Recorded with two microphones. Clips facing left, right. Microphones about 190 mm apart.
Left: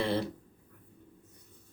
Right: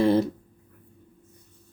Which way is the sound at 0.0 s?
45° right (ahead or behind).